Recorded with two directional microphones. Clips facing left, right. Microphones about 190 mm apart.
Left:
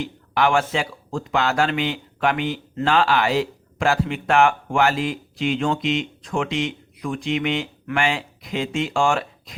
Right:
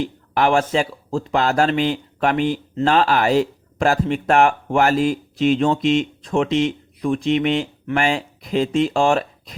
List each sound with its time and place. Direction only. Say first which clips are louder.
0.3 s speech: right 3 dB; 40° right (ahead or behind)